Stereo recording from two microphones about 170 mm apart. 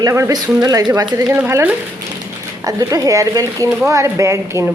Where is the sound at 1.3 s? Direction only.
10° right (ahead or behind).